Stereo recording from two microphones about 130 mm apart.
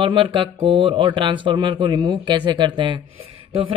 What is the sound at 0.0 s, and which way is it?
Speech, 40° right (ahead or behind).